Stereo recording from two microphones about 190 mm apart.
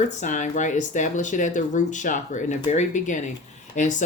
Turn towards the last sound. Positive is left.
turn(degrees=40)  # may be behind; listen again after turning